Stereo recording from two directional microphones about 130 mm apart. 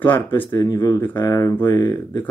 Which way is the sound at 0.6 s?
30° left (ahead or behind).